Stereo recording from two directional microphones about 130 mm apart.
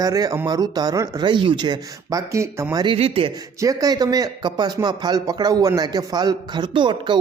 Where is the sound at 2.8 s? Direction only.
50° right (ahead or behind).